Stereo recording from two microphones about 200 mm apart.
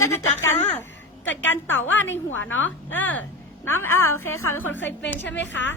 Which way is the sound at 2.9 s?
10° left (ahead or behind).